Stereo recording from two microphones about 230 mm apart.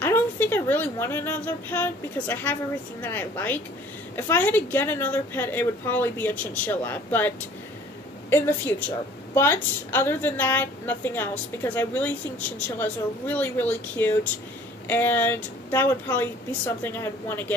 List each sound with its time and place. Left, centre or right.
0.0 s a woman's voice: centre